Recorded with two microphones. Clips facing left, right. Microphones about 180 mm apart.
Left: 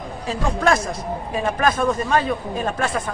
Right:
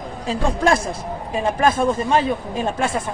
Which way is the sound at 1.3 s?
25° right (ahead or behind).